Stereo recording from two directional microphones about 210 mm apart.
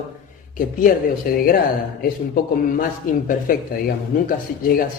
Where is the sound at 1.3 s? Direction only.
45° left (ahead or behind).